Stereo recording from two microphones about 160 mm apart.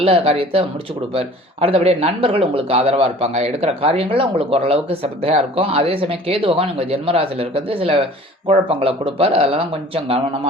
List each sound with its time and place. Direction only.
0.0 s speech: 35° right (ahead or behind)